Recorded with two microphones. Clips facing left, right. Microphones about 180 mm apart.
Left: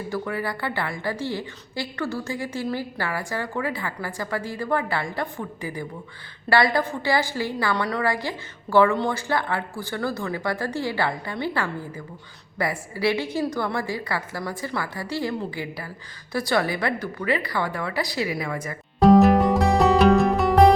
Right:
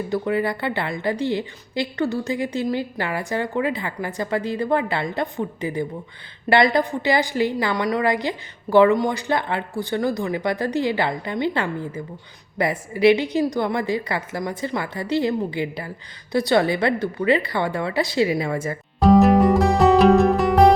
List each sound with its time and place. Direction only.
0.1 s a woman's voice: 20° right (ahead or behind)
18.9 s music: centre (ahead or behind)